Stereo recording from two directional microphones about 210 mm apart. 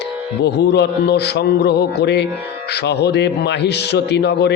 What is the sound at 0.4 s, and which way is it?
A man's voice, 55° left (ahead or behind).